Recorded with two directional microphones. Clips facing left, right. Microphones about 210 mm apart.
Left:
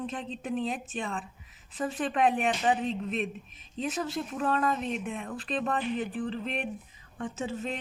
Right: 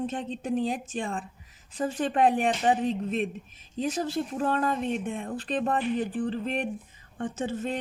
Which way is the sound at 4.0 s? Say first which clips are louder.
Right 2 dB; 35° right (ahead or behind).